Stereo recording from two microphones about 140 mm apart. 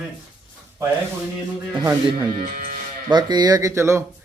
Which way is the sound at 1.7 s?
15° right (ahead or behind).